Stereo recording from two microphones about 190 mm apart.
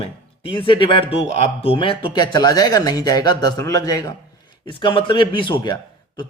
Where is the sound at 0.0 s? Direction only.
30° left (ahead or behind).